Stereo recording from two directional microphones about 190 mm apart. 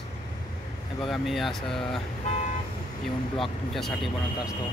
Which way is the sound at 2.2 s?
35° left (ahead or behind).